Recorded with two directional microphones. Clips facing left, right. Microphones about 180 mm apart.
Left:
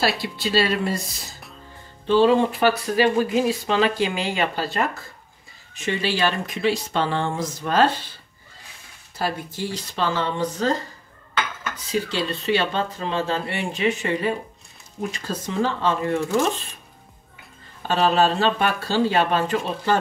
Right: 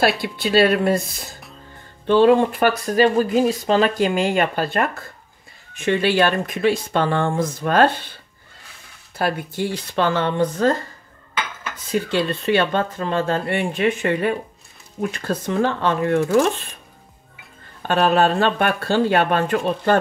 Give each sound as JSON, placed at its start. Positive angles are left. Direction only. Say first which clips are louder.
{"t": 0.2, "sound": "speech", "louder": "right 5 dB", "side_deg": -55}
{"t": 9.2, "sound": "speech", "louder": "right 4 dB", "side_deg": -60}
{"t": 11.9, "sound": "speech", "louder": "right 4 dB", "side_deg": -55}
{"t": 17.8, "sound": "speech", "louder": "right 2 dB", "side_deg": -55}